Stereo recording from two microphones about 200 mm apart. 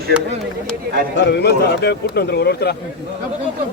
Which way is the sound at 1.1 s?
55° left (ahead or behind).